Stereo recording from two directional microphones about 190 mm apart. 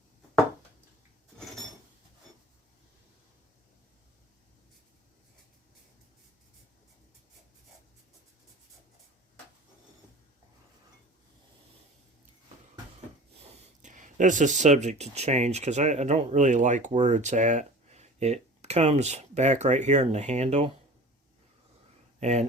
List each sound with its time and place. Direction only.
13.8 s speech: 40° right (ahead or behind)
22.2 s speech: 35° right (ahead or behind)